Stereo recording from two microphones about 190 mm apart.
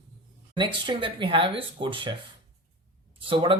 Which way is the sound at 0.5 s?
25° right (ahead or behind).